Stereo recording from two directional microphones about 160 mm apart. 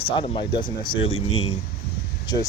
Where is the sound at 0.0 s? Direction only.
30° left (ahead or behind).